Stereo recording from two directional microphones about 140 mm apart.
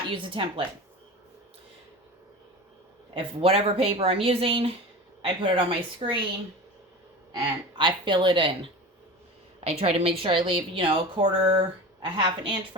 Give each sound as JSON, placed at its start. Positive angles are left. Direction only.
{"t": 0.1, "sound": "a woman's voice", "side_deg": -35}
{"t": 3.2, "sound": "a woman's voice", "side_deg": -45}
{"t": 7.8, "sound": "a woman's voice", "side_deg": -35}